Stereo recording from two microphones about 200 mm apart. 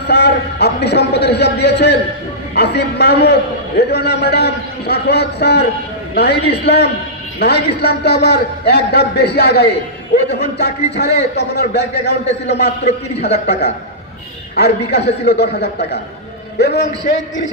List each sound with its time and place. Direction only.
0.0 s a man's voice: 55° left (ahead or behind)